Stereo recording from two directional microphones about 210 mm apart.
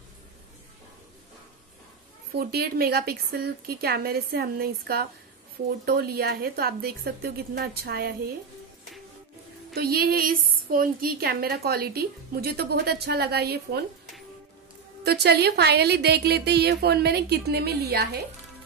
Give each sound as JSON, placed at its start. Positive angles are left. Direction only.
{"t": 2.3, "sound": "a woman's voice", "side_deg": -45}
{"t": 9.8, "sound": "a woman's voice", "side_deg": -45}
{"t": 15.0, "sound": "a woman's voice", "side_deg": -50}